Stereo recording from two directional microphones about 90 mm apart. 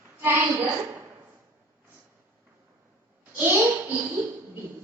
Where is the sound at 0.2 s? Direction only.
25° right (ahead or behind).